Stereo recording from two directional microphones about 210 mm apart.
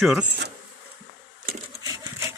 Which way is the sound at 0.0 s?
Centre (ahead or behind).